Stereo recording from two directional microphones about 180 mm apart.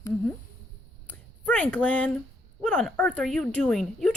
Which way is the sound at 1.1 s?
5° left (ahead or behind).